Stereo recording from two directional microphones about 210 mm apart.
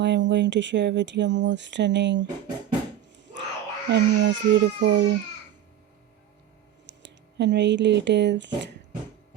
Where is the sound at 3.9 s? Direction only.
60° right (ahead or behind).